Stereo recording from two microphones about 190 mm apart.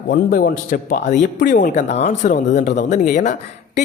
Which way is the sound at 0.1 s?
50° left (ahead or behind).